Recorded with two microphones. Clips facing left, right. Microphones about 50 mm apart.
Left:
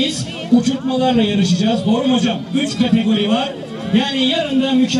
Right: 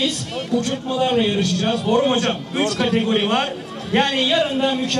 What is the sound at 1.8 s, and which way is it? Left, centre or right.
Speech, right.